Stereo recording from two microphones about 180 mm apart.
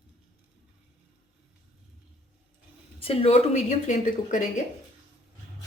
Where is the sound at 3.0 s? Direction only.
30° left (ahead or behind).